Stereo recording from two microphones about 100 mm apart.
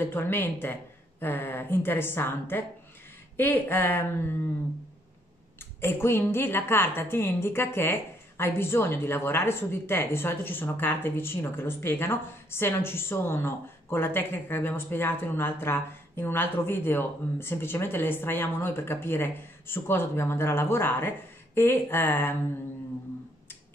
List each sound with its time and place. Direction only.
0.0 s a woman's voice: 20° left (ahead or behind)
5.8 s a woman's voice: 25° left (ahead or behind)